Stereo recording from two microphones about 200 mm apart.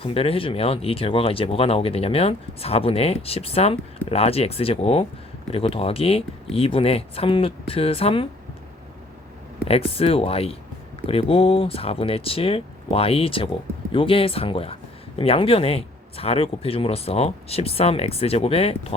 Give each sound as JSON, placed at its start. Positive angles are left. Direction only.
{"t": 0.0, "sound": "speech", "side_deg": 30}
{"t": 9.6, "sound": "speech", "side_deg": 30}